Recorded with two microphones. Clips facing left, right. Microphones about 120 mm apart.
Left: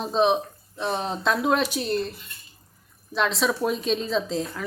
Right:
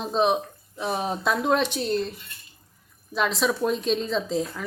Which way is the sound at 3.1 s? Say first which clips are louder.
Even; centre (ahead or behind).